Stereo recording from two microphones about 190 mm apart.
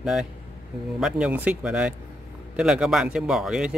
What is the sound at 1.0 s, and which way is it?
Speech, 5° right (ahead or behind).